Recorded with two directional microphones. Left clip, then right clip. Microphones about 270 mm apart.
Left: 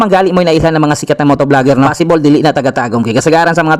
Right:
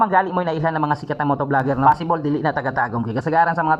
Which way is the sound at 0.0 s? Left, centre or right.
Left.